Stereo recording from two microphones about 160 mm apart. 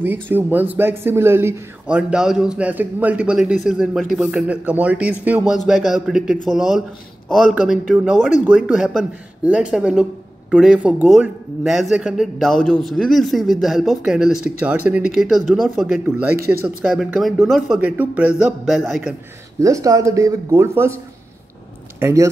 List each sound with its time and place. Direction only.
0.0 s speech: 15° right (ahead or behind)
16.1 s speech: 10° right (ahead or behind)
19.6 s speech: 20° right (ahead or behind)
22.0 s speech: 20° right (ahead or behind)